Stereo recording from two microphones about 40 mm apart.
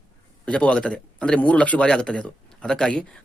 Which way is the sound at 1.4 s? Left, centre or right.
Left.